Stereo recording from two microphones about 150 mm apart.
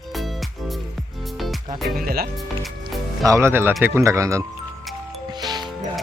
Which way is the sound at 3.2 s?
20° right (ahead or behind).